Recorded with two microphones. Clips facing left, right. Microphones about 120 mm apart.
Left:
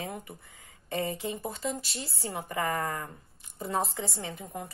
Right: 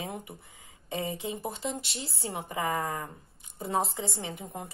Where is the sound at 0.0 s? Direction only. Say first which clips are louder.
Even; 20° right (ahead or behind).